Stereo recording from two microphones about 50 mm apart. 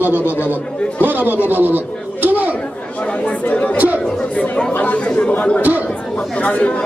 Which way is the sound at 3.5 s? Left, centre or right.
Left.